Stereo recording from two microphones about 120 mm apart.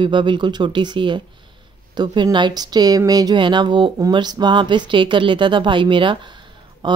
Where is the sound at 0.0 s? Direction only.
45° right (ahead or behind).